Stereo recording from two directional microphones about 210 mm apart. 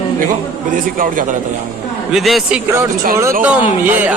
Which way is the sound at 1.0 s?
40° right (ahead or behind).